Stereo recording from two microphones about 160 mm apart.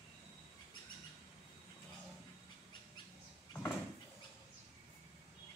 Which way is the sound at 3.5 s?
15° left (ahead or behind).